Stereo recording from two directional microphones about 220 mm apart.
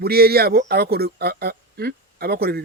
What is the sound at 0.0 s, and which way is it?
Speech, 45° right (ahead or behind).